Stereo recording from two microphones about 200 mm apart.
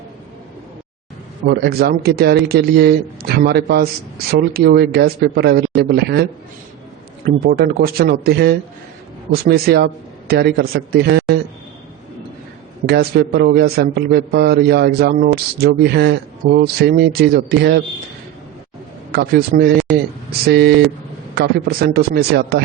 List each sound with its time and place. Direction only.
1.5 s a man's voice: 50° right (ahead or behind)
7.3 s a man's voice: 50° right (ahead or behind)
12.8 s a man's voice: 55° right (ahead or behind)
19.1 s a man's voice: 50° right (ahead or behind)